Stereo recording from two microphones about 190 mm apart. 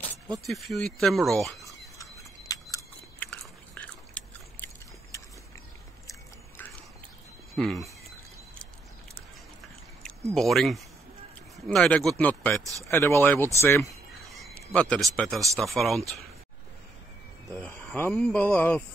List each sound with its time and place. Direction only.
0.5 s speech: centre (ahead or behind)
2.0 s a sound: 20° left (ahead or behind)
3.2 s biting: 10° left (ahead or behind)
6.0 s biting: 10° left (ahead or behind)
7.5 s speech: centre (ahead or behind)
10.3 s speech: centre (ahead or behind)
14.2 s a sound: centre (ahead or behind)
14.7 s speech: 5° left (ahead or behind)
17.6 s speech: 10° left (ahead or behind)